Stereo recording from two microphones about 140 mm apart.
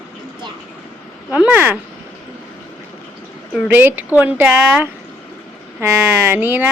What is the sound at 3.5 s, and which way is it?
Speech, 10° right (ahead or behind).